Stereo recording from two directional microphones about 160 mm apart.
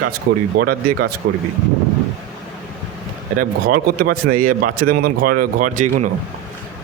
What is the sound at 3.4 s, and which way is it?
Speech, 65° right (ahead or behind).